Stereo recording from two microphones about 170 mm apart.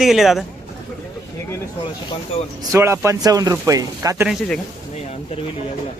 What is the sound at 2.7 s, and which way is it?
Speech, 15° right (ahead or behind).